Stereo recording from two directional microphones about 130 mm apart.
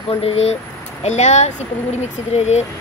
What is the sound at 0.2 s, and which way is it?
Speech, 50° left (ahead or behind).